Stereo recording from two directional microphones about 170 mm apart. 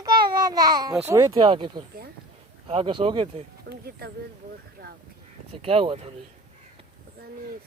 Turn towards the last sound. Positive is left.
turn(degrees=-35)  # may be behind; listen again after turning